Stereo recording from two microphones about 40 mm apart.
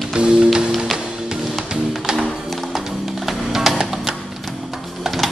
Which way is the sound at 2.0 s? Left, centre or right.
Centre.